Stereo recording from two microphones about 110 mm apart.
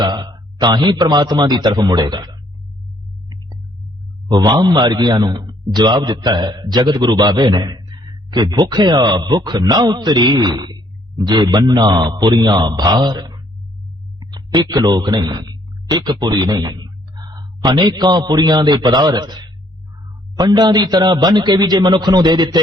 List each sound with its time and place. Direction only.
0.0 s a man's voice: 40° right (ahead or behind)
4.3 s a man's voice: 35° right (ahead or behind)